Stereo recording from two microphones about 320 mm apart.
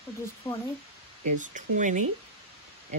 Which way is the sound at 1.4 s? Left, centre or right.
Right.